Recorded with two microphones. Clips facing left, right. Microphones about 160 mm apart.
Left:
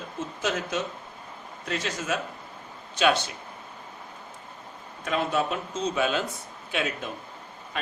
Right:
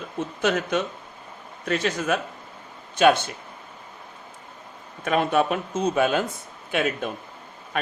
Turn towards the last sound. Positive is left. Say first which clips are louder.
# right 5 dB
turn(degrees=-55)  # may be behind; listen again after turning